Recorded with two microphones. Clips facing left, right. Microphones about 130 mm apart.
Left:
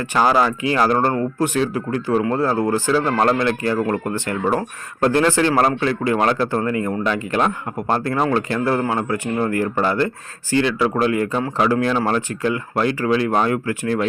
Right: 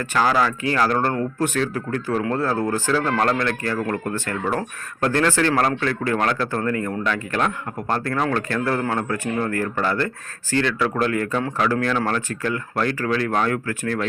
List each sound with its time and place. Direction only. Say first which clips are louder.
0.0 s speech: left 3 dB; 15° left (ahead or behind)